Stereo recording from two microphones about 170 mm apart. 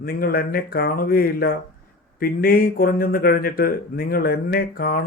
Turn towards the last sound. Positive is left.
turn(degrees=60)  # may be behind; listen again after turning